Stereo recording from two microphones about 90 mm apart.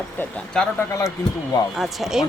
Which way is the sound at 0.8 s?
35° left (ahead or behind).